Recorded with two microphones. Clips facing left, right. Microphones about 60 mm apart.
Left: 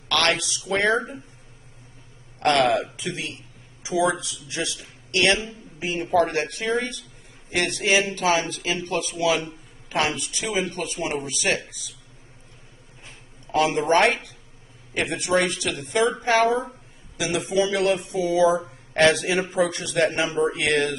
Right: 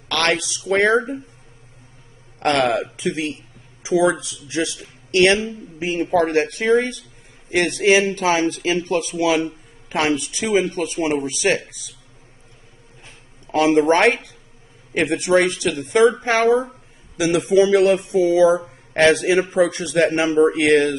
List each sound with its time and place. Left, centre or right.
0.1 s a sound: right
0.7 s speech: right
2.4 s speech: right
13.7 s speech: right
17.5 s speech: right